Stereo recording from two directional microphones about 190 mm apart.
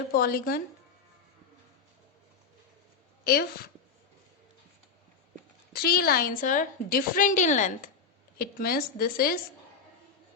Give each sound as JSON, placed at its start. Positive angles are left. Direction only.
{"t": 0.1, "sound": "a woman's voice", "side_deg": 50}
{"t": 5.7, "sound": "a woman's voice", "side_deg": 55}